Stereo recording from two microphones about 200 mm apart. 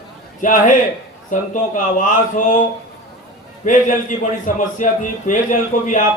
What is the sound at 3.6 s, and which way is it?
Speech, 40° left (ahead or behind).